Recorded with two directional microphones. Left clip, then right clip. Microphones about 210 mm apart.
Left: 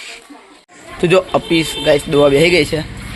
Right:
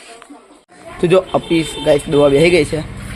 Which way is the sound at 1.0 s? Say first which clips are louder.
Even; 5° right (ahead or behind).